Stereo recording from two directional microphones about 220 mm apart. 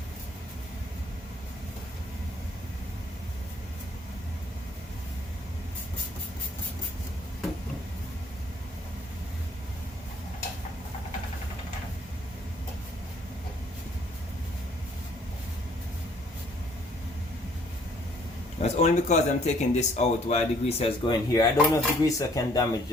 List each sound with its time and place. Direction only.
18.6 s speech: 30° left (ahead or behind); by 22.6 s 15° left (ahead or behind)